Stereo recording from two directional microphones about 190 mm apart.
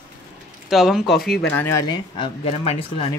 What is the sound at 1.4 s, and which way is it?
Speech, 10° left (ahead or behind).